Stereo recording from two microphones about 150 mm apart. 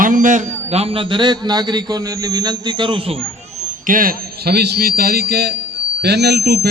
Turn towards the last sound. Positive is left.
turn(degrees=-90)